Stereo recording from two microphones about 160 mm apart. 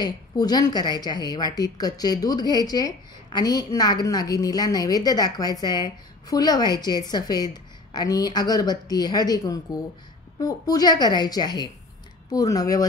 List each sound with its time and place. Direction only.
0.0 s a woman's voice: 25° left (ahead or behind)